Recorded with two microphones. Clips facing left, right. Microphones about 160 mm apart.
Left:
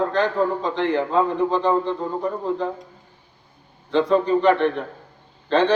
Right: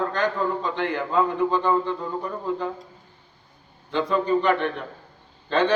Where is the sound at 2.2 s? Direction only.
45° left (ahead or behind).